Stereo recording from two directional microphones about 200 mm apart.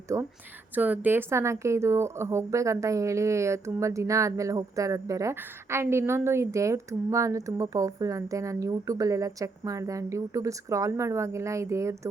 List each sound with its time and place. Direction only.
0.1 s a woman's voice: 15° right (ahead or behind)